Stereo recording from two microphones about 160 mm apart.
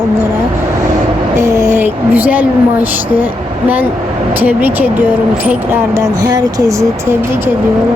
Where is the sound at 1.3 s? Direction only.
15° right (ahead or behind).